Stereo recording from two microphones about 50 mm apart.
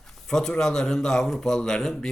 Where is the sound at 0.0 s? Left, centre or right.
Centre.